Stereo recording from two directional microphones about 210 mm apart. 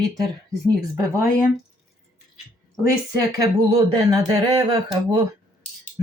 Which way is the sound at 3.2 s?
20° right (ahead or behind).